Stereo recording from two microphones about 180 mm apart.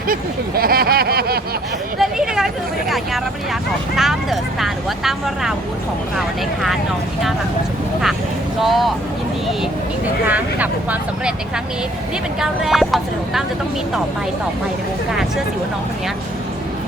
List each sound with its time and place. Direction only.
0.1 s a sound: 55° right (ahead or behind)
2.0 s a sound: 5° right (ahead or behind)
3.9 s vehicle: centre (ahead or behind)
6.1 s speech: centre (ahead or behind)
8.6 s speech: centre (ahead or behind)
10.2 s speech: 10° right (ahead or behind)
12.4 s speech: centre (ahead or behind)